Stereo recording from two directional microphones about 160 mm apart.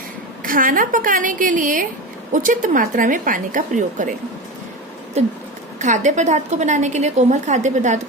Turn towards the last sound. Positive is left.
turn(degrees=-50)  # may be behind; listen again after turning